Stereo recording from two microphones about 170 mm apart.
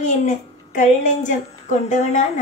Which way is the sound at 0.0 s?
45° left (ahead or behind).